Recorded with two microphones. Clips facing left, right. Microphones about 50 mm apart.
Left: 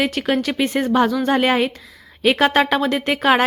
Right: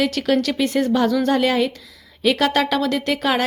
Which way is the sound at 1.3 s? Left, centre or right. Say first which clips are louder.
Left 1 dB; left.